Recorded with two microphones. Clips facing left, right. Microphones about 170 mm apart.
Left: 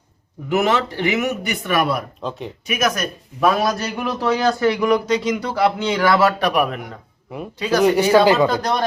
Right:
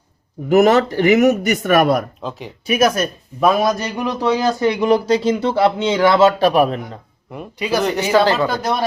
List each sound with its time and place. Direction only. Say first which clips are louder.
0.4 s speech: right 6 dB; 40° right (ahead or behind)
2.2 s speech: left 1 dB; centre (ahead or behind)
2.6 s speech: right 6 dB; 30° right (ahead or behind)
3.4 s a man's voice: right 2 dB; 20° right (ahead or behind)
7.8 s speech: left 2 dB; 10° left (ahead or behind)